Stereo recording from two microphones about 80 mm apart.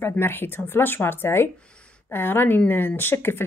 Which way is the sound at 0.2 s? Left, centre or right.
Left.